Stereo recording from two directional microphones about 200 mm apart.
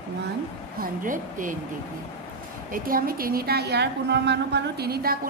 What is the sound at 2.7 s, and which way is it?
A woman's voice, 45° right (ahead or behind).